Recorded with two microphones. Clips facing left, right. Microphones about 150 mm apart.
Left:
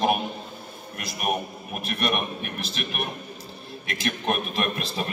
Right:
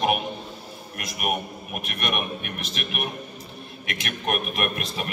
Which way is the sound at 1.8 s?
35° left (ahead or behind).